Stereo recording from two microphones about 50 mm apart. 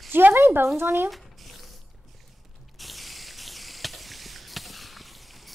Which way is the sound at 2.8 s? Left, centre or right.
Centre.